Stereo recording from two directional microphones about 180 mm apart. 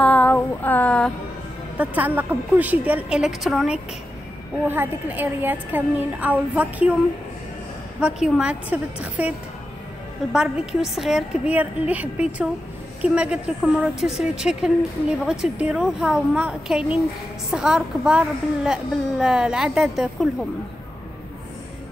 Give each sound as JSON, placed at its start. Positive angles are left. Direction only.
{"t": 0.0, "sound": "a sound", "side_deg": 10}
{"t": 1.8, "sound": "a woman's voice", "side_deg": -10}
{"t": 8.0, "sound": "a woman's voice", "side_deg": -5}
{"t": 10.3, "sound": "a woman's voice", "side_deg": -5}